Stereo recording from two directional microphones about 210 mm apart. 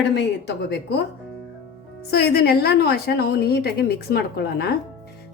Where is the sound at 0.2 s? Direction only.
50° left (ahead or behind).